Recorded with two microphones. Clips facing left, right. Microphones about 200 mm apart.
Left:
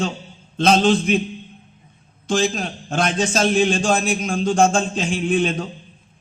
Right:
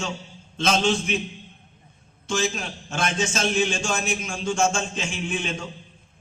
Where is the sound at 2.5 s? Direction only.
35° left (ahead or behind).